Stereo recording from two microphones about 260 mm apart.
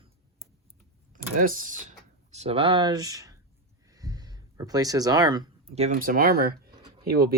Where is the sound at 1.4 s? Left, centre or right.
Right.